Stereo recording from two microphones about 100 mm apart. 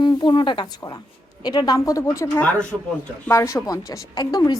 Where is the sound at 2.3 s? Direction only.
20° left (ahead or behind).